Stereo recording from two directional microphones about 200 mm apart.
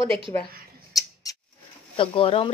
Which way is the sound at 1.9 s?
25° left (ahead or behind).